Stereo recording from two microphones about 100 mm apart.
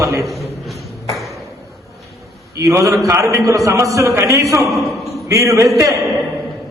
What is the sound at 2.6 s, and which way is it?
A man's voice, 35° right (ahead or behind).